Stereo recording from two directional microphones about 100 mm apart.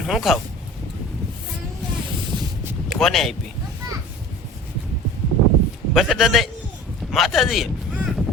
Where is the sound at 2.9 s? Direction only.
5° left (ahead or behind).